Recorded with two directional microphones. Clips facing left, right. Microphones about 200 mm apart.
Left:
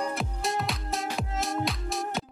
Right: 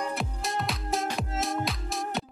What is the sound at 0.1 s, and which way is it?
Music, centre (ahead or behind).